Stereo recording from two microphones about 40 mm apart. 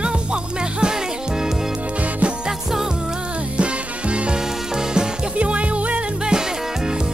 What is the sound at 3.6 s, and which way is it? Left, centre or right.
Music, right.